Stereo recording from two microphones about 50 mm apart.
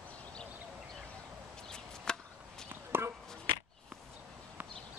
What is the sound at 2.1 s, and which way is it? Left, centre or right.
Chop, centre.